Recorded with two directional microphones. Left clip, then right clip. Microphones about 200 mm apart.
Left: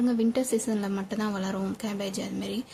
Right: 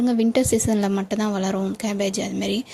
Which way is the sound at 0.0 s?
30° right (ahead or behind).